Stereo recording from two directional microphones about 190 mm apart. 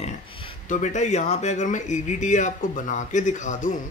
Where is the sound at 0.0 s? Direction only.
25° left (ahead or behind).